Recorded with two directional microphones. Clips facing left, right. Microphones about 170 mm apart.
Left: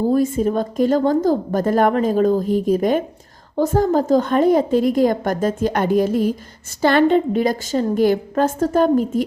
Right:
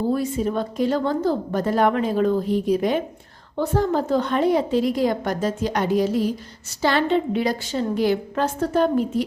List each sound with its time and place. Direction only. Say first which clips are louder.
0.1 s a woman's voice: left 5 dB; 50° left (ahead or behind)